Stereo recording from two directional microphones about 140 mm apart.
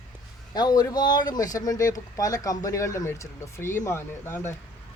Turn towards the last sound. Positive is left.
turn(degrees=20)  # may be behind; listen again after turning